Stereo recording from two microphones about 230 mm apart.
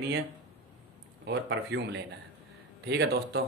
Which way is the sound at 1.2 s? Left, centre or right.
Right.